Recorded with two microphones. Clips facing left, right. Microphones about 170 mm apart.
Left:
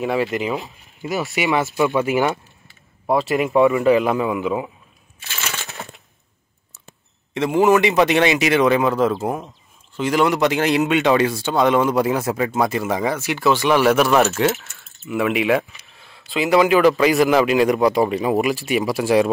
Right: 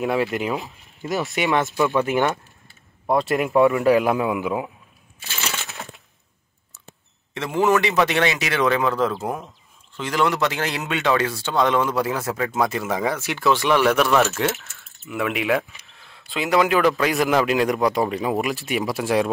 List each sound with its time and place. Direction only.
0.0 s speech: centre (ahead or behind); by 2.1 s 15° left (ahead or behind)
3.1 s speech: centre (ahead or behind)
7.3 s speech: 15° left (ahead or behind)
12.4 s speech: 5° left (ahead or behind)